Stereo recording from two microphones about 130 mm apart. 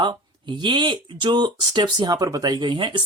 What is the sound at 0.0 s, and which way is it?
Speech, 35° right (ahead or behind).